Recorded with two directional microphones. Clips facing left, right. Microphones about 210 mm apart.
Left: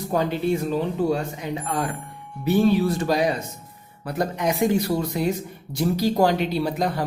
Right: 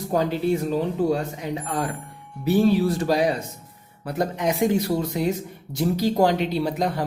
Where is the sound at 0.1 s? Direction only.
40° right (ahead or behind).